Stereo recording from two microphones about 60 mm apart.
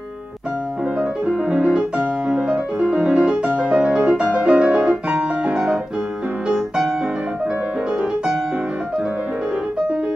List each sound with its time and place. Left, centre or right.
1.2 s music: centre